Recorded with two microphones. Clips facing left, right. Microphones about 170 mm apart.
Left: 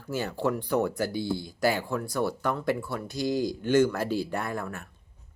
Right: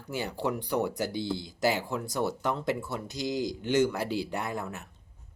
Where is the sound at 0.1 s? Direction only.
15° right (ahead or behind).